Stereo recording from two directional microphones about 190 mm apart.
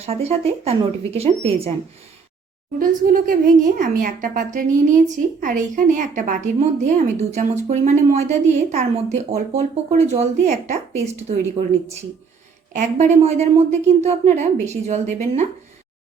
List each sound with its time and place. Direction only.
0.0 s speech: 35° right (ahead or behind)
2.7 s speech: 45° right (ahead or behind)
12.7 s speech: 40° right (ahead or behind)